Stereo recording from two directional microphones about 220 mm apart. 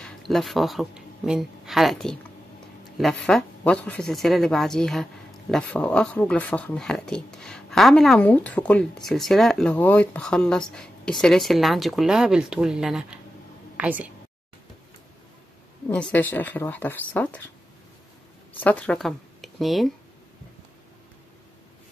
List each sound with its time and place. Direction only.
0.3 s speech: centre (ahead or behind)
15.9 s speech: 5° left (ahead or behind)
18.6 s speech: 5° left (ahead or behind)